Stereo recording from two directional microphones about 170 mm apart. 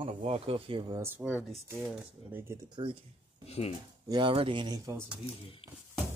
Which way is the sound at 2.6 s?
25° right (ahead or behind).